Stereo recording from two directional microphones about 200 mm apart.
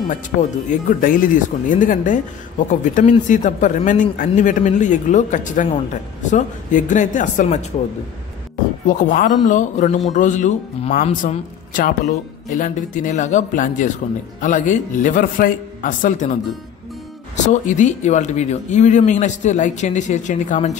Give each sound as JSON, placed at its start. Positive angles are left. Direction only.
{"t": 0.1, "sound": "a man's voice", "side_deg": 40}
{"t": 8.8, "sound": "a man's voice", "side_deg": 40}
{"t": 17.5, "sound": "a man's voice", "side_deg": 35}